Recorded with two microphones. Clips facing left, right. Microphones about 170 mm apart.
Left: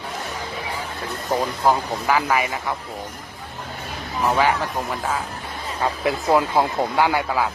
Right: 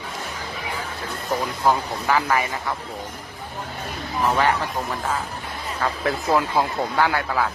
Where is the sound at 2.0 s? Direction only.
10° left (ahead or behind).